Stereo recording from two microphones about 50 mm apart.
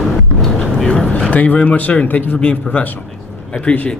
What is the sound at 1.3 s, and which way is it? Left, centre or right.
A man's voice, left.